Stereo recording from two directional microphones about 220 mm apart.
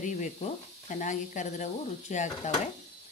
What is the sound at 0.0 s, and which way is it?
Speech, 35° left (ahead or behind).